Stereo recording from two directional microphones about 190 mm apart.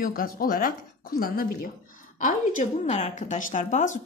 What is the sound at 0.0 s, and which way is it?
A woman's voice, 50° left (ahead or behind).